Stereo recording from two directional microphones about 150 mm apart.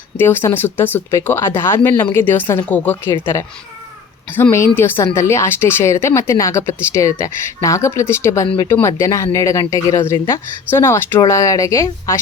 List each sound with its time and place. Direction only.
0.2 s a woman's voice: 15° left (ahead or behind)